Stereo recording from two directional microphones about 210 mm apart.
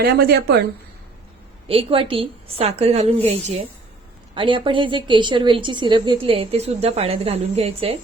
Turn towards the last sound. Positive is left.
turn(degrees=-30)  # may be behind; listen again after turning